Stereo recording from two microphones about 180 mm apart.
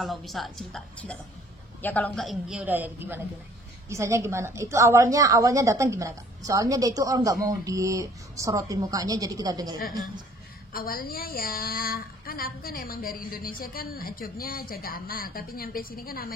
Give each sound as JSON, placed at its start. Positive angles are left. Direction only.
{"t": 0.0, "sound": "a man's voice", "side_deg": 0}
{"t": 10.7, "sound": "a woman's voice", "side_deg": 55}